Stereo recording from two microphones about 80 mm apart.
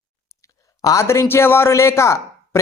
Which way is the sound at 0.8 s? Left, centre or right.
Left.